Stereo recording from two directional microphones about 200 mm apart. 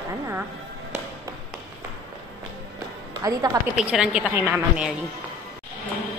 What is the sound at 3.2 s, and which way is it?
Speech, 20° right (ahead or behind).